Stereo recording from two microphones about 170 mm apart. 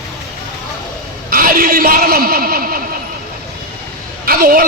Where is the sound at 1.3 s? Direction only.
60° right (ahead or behind).